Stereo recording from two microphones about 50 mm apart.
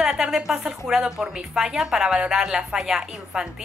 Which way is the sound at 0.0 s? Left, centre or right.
Centre.